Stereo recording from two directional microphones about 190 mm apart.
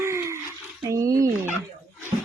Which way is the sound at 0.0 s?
15° right (ahead or behind).